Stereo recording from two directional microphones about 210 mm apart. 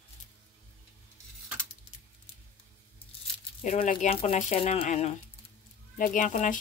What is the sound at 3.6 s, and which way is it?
Speech, 35° left (ahead or behind).